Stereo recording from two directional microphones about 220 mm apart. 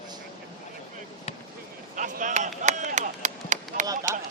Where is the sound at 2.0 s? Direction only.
35° right (ahead or behind).